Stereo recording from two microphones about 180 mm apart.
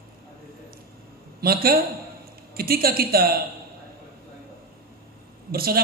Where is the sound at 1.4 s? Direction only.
55° right (ahead or behind).